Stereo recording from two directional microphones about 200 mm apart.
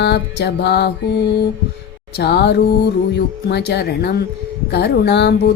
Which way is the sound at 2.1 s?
55° left (ahead or behind).